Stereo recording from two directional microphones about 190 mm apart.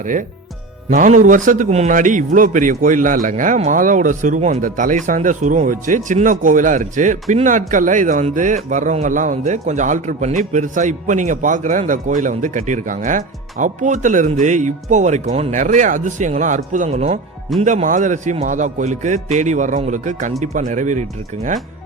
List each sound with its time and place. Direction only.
0.0 s a man's voice: 45° right (ahead or behind)